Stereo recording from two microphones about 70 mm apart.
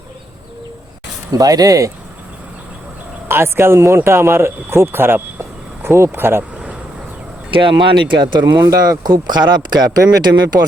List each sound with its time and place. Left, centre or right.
1.3 s speech: right
3.2 s speech: right
8.1 s speech: right